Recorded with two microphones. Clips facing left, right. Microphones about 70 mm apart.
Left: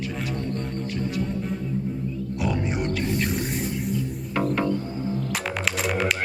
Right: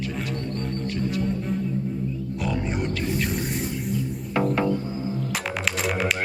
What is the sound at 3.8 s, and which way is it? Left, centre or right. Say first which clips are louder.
Music: even; centre.